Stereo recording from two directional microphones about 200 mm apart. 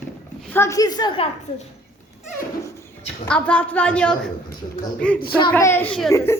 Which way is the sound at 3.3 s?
5° left (ahead or behind).